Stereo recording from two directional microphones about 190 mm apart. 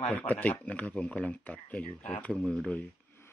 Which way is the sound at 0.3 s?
10° left (ahead or behind).